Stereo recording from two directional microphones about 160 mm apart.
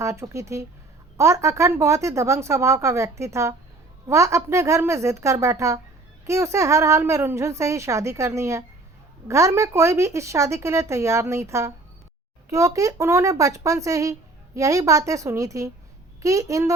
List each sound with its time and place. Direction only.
0.0 s a woman's voice: 20° right (ahead or behind)